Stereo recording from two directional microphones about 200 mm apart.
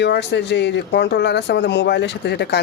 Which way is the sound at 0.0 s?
60° left (ahead or behind).